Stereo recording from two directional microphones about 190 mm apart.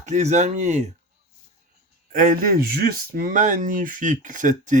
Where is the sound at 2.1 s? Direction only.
45° right (ahead or behind).